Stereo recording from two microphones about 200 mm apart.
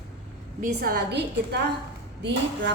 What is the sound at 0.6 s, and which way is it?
A woman's voice, 45° right (ahead or behind).